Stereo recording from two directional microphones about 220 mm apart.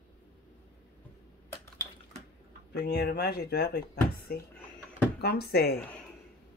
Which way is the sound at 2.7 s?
50° left (ahead or behind).